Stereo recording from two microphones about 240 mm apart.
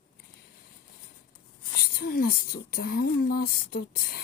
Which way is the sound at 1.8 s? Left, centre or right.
Left.